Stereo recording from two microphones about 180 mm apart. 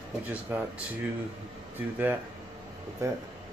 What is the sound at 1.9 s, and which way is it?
Speech, 10° right (ahead or behind).